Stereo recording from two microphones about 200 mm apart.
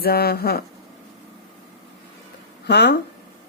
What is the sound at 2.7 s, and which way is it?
Speech, 60° left (ahead or behind).